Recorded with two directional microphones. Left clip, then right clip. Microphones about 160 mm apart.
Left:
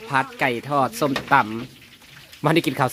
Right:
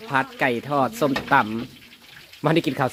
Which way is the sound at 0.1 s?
5° left (ahead or behind).